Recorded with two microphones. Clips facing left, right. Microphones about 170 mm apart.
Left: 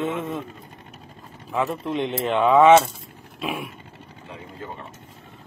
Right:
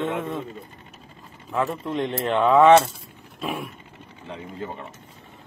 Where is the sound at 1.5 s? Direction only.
Centre (ahead or behind).